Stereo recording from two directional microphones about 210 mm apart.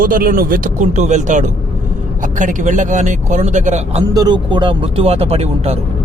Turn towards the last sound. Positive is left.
turn(degrees=-30)  # may be behind; listen again after turning